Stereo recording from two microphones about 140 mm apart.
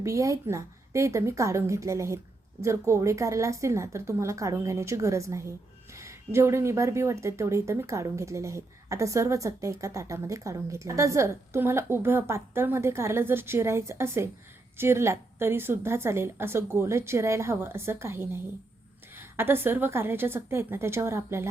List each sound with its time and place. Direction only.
0.0 s a woman's voice: 20° right (ahead or behind)